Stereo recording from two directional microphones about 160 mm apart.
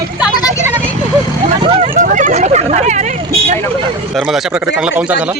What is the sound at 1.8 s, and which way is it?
Speech, 50° right (ahead or behind).